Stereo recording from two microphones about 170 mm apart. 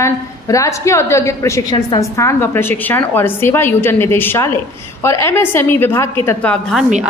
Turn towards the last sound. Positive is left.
turn(degrees=5)  # may be behind; listen again after turning